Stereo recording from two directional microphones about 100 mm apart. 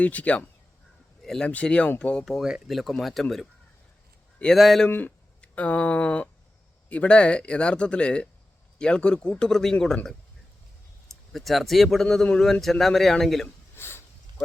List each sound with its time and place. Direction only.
0.0 s speech: 15° left (ahead or behind)
4.5 s speech: centre (ahead or behind)
4.9 s speech: 15° left (ahead or behind)
13.7 s a sound: 25° left (ahead or behind)